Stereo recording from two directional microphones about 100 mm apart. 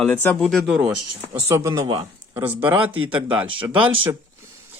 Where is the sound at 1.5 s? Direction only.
30° right (ahead or behind).